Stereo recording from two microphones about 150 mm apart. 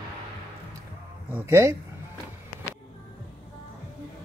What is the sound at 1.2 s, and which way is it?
Speech, 15° right (ahead or behind).